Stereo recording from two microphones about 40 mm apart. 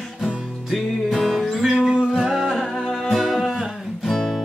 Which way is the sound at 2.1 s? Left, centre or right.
Centre.